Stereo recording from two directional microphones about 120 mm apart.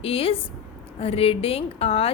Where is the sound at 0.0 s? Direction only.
50° left (ahead or behind).